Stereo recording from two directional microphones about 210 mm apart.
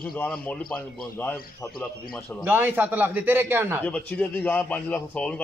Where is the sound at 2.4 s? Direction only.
10° right (ahead or behind).